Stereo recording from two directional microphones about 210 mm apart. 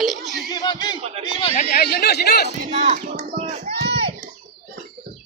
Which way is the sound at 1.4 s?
25° left (ahead or behind).